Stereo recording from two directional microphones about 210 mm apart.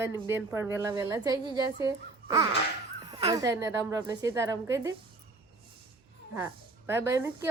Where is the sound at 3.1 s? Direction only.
30° right (ahead or behind).